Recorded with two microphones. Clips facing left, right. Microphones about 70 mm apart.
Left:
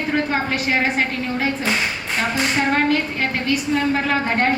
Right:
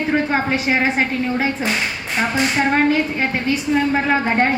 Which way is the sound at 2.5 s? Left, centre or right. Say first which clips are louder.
Right 2 dB; centre.